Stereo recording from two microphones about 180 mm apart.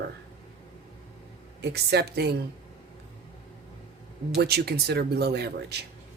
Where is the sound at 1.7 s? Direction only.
65° right (ahead or behind).